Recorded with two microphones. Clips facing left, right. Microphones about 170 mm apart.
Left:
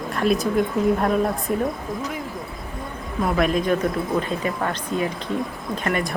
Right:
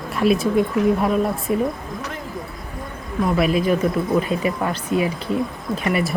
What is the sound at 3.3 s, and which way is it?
Speech, 5° right (ahead or behind).